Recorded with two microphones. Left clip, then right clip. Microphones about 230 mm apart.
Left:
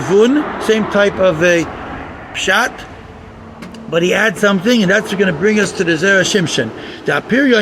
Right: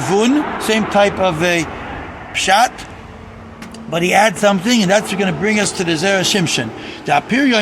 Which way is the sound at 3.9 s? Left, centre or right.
Right.